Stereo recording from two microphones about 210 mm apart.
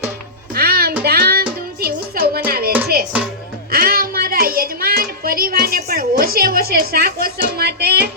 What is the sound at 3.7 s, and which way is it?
Child singing, 45° right (ahead or behind).